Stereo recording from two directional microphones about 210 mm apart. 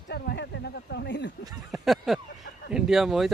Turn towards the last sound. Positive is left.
turn(degrees=0)  # may be behind; listen again after turning